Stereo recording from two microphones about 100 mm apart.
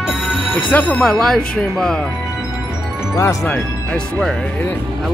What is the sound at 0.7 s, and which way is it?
Speech, 15° left (ahead or behind).